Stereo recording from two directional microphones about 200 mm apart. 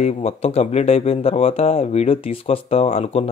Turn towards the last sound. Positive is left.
turn(degrees=30)  # may be behind; listen again after turning